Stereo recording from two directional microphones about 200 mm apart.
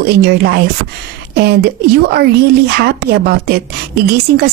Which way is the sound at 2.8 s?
55° right (ahead or behind).